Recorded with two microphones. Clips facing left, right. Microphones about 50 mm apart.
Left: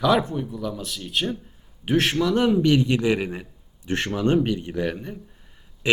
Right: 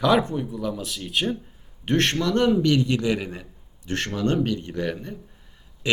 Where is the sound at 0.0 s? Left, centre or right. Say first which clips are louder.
Even; centre.